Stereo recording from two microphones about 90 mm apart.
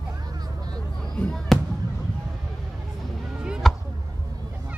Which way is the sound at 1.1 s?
15° left (ahead or behind).